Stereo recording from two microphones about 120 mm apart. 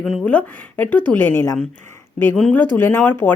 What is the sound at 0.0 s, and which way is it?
A woman's voice, 5° left (ahead or behind).